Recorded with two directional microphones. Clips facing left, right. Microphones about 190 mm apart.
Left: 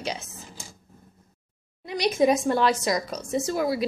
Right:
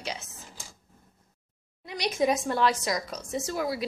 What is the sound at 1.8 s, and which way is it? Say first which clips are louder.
Speech: left 5 dB; 30° left (ahead or behind).